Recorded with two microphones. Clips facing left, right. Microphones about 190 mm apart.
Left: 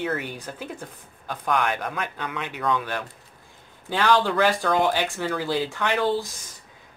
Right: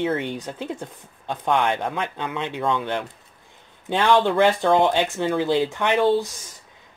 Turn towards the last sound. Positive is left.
turn(degrees=-20)  # may be behind; listen again after turning